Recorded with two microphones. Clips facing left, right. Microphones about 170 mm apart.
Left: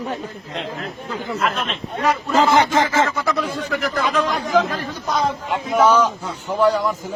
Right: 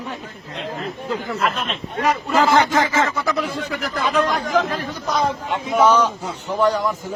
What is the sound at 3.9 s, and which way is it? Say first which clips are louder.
Speech: right 3 dB; 10° right (ahead or behind).